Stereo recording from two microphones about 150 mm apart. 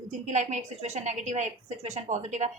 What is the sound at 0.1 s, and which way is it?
A woman's voice, 55° right (ahead or behind).